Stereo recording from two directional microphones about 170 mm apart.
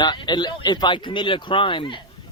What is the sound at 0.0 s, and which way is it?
Speech, 25° left (ahead or behind).